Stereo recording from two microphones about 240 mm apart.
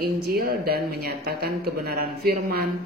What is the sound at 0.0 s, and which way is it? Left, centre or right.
A woman's voice, right.